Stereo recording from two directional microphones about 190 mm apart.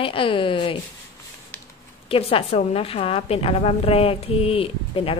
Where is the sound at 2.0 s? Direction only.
30° left (ahead or behind).